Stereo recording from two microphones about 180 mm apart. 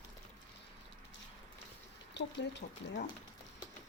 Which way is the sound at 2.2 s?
75° left (ahead or behind).